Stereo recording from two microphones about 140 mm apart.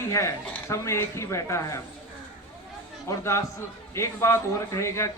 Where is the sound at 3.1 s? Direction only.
20° left (ahead or behind).